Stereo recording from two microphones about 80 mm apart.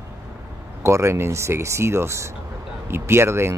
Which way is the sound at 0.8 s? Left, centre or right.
Right.